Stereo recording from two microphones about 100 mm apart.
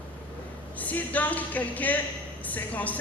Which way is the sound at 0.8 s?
15° left (ahead or behind).